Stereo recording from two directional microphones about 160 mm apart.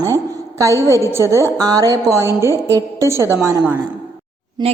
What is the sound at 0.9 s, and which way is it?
A woman's voice, 15° right (ahead or behind).